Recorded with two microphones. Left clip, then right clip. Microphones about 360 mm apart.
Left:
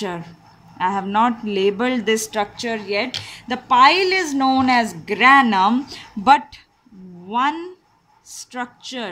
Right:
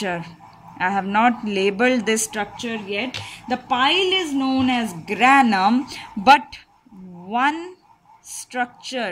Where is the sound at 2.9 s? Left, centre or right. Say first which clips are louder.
Left 3 dB; left.